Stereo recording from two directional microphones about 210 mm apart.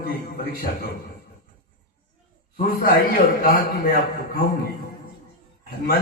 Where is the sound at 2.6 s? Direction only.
45° left (ahead or behind).